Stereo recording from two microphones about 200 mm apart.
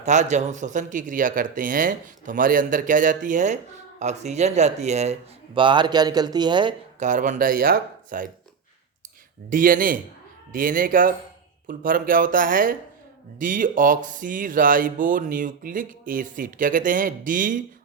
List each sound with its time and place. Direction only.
0.0 s speech: 35° right (ahead or behind)
7.0 s speech: 40° right (ahead or behind)
9.5 s speech: 45° right (ahead or behind)